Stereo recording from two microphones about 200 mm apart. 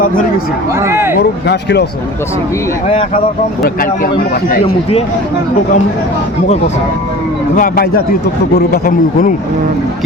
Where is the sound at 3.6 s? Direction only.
45° left (ahead or behind).